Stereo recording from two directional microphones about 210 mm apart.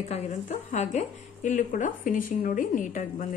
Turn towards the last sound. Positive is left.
turn(degrees=40)  # may be behind; listen again after turning